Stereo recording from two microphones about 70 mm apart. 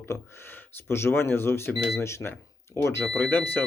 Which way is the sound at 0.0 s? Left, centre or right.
Left.